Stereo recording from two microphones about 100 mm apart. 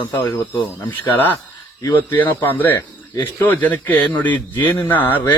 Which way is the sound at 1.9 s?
20° left (ahead or behind).